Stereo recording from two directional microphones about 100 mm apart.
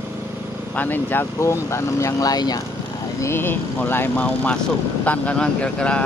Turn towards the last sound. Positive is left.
turn(degrees=10)  # may be behind; listen again after turning